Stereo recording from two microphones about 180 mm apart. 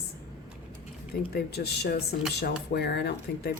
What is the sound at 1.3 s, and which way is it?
Speech, 65° left (ahead or behind).